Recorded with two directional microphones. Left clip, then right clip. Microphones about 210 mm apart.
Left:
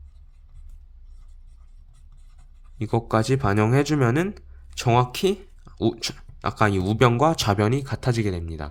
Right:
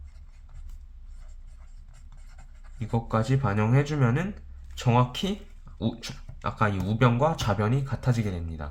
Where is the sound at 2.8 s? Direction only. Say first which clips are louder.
Left 6 dB; 55° left (ahead or behind).